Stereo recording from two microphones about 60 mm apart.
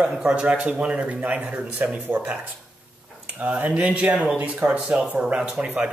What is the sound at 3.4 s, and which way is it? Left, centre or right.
Speech, right.